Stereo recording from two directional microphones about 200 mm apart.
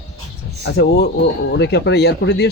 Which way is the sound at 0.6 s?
55° left (ahead or behind).